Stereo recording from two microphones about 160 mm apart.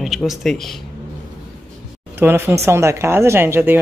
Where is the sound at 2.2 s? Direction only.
15° right (ahead or behind).